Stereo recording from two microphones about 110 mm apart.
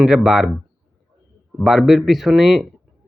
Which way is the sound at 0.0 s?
5° right (ahead or behind).